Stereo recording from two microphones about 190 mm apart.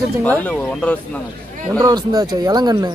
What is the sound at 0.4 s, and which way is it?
Speech, 5° left (ahead or behind).